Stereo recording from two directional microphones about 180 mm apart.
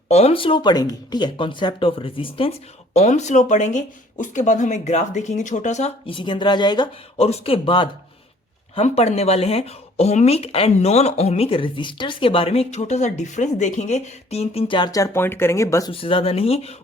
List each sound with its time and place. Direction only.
0.1 s speech: 35° left (ahead or behind); by 15.9 s 15° left (ahead or behind)
15.9 s speech: 30° left (ahead or behind)